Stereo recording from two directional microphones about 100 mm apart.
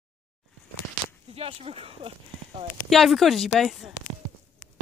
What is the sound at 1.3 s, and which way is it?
Speech, 80° right.